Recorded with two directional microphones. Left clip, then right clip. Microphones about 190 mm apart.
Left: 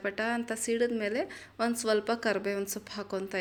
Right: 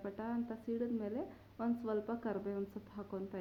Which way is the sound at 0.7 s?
15° left (ahead or behind).